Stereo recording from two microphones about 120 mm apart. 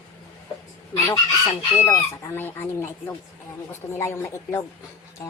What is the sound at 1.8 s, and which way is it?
Speech, 25° left (ahead or behind).